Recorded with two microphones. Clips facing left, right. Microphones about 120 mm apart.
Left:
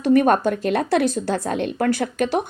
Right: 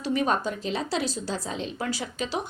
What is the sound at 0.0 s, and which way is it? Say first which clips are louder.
A woman's voice: left 9 dB; 55° left (ahead or behind).